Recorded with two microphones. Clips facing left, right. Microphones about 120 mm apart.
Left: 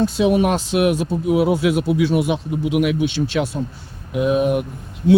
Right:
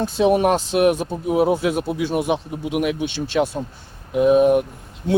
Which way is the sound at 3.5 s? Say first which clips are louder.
Left 2 dB; 60° right (ahead or behind).